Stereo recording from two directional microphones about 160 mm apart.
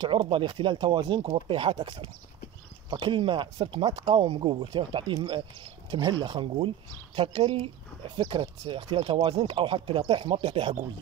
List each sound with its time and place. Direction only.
0.0 s speech: 30° right (ahead or behind)